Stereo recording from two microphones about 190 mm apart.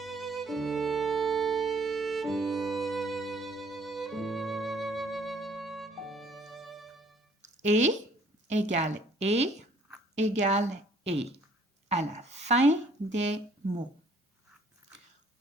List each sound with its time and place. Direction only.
0.0 s music: centre (ahead or behind)
7.6 s a woman's voice: 35° right (ahead or behind)